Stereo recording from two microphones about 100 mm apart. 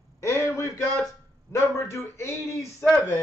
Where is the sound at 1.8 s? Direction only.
30° left (ahead or behind).